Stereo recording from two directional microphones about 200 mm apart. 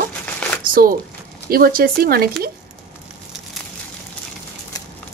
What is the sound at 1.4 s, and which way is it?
Speech, 45° right (ahead or behind).